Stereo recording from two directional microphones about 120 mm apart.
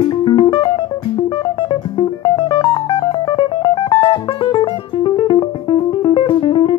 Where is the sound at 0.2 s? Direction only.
40° left (ahead or behind).